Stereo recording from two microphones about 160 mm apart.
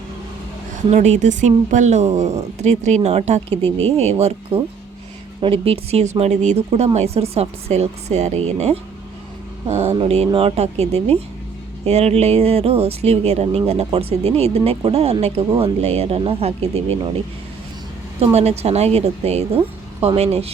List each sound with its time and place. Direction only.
0.9 s speech: 45° right (ahead or behind)
18.3 s speech: 40° right (ahead or behind)